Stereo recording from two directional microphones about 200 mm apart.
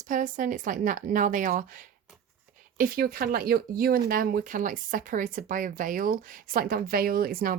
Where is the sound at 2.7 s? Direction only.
45° right (ahead or behind).